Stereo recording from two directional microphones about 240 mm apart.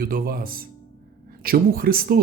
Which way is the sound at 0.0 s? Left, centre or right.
Right.